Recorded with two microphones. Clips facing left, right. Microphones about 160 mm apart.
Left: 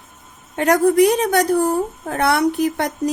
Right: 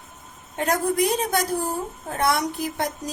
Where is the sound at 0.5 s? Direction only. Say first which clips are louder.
Left 8 dB; 75° left (ahead or behind).